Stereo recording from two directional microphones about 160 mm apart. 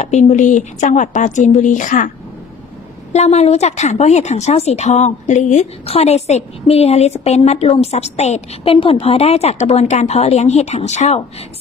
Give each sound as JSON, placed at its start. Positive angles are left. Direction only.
{"t": 0.0, "sound": "speech", "side_deg": 45}
{"t": 3.1, "sound": "speech", "side_deg": 40}